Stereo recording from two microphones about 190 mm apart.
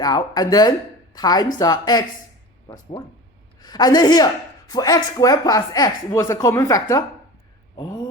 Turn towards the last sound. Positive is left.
turn(degrees=20)  # may be behind; listen again after turning